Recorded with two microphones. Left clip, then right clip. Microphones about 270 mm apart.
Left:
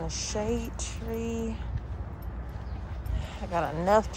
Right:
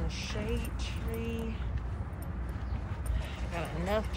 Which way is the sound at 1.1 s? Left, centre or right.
Left.